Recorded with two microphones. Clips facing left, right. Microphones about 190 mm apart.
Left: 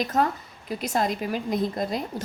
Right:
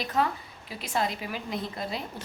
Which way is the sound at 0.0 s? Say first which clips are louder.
Left 4 dB; 45° left (ahead or behind).